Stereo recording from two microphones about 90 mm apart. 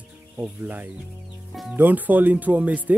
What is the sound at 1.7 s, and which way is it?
Speech, 20° right (ahead or behind).